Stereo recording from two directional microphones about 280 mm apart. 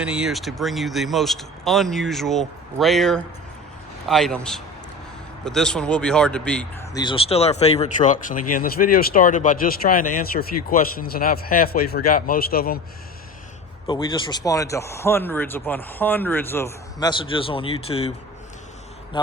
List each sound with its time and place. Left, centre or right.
0.0 s speech: centre; by 12.8 s left
13.8 s speech: centre
19.1 s speech: centre